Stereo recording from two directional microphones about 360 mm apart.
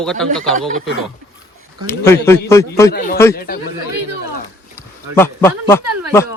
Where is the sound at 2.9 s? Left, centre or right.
Left.